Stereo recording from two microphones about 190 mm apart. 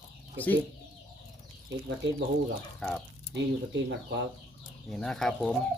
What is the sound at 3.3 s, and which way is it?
Speech, 65° right (ahead or behind).